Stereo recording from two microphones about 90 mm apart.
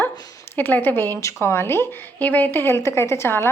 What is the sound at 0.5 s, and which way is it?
A woman's voice, 20° left (ahead or behind).